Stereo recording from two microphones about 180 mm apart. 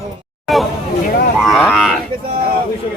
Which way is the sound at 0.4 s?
Centre (ahead or behind).